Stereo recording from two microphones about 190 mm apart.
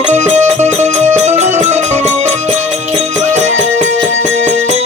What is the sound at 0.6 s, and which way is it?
Music, 35° right (ahead or behind).